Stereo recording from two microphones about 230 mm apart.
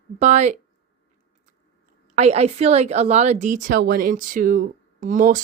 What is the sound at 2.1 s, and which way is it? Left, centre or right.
A woman's voice, right.